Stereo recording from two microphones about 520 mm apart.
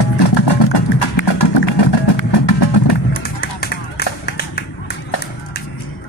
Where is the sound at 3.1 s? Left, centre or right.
Centre.